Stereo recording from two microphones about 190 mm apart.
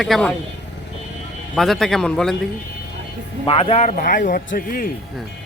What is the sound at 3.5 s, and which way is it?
A man's voice, 30° left (ahead or behind).